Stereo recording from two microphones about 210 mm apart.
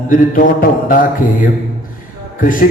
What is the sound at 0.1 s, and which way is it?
A man's voice, 40° left (ahead or behind).